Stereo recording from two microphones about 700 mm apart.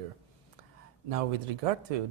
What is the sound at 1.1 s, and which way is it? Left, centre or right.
Speech, right.